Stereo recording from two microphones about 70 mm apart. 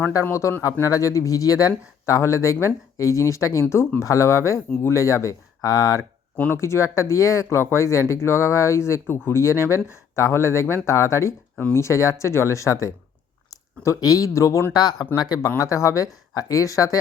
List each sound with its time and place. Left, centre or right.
0.3 s speech: left
0.6 s speech: left
4.0 s speech: left
6.3 s speech: left
6.6 s speech: left
14.7 s speech: left
15.5 s speech: left